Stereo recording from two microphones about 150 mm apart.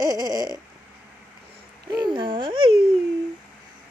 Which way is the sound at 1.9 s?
30° right (ahead or behind).